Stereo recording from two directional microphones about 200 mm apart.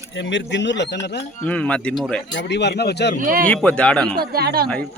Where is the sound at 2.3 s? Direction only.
60° left (ahead or behind).